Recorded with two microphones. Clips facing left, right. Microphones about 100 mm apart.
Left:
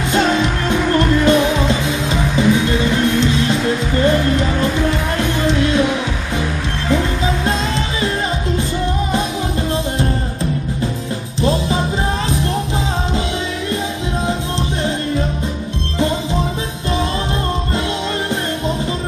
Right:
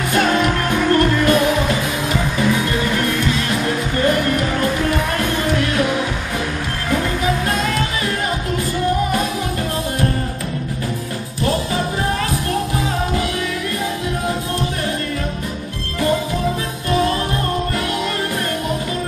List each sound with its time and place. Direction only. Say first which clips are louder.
0.1 s music: even; 25° left (ahead or behind)
7.4 s music: left 1 dB; 25° left (ahead or behind)
11.4 s music: left 2 dB; 25° left (ahead or behind)